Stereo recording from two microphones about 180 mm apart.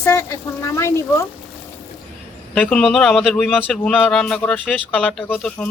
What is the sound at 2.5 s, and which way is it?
A man's voice, 5° left (ahead or behind).